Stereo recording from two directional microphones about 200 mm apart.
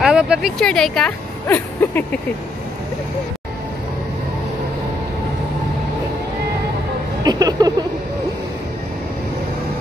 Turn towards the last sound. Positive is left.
turn(degrees=-20)  # may be behind; listen again after turning